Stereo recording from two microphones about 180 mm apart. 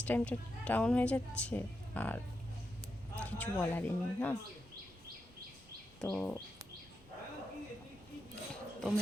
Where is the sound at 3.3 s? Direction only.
10° left (ahead or behind).